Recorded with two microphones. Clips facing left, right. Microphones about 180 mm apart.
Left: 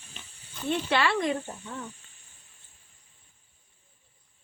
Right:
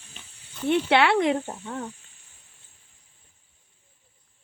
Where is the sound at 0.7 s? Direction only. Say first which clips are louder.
Right 6 dB; 65° right (ahead or behind).